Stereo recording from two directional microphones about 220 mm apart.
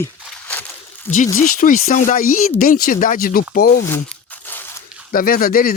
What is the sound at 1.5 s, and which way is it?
Speech, 35° left (ahead or behind).